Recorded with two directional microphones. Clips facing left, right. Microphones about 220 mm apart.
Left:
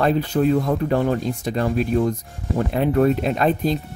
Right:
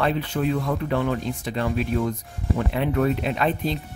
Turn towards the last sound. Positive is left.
turn(degrees=40)  # may be behind; listen again after turning